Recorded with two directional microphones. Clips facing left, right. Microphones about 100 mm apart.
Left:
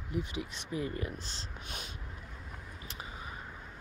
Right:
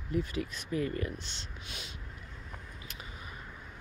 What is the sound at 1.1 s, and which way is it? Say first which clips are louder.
Speech: even; 35° left (ahead or behind).